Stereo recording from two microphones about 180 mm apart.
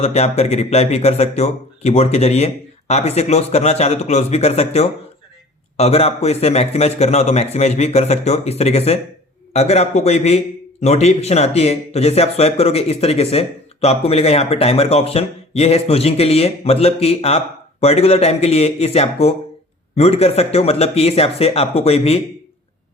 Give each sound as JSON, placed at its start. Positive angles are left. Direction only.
{"t": 0.0, "sound": "speech", "side_deg": 35}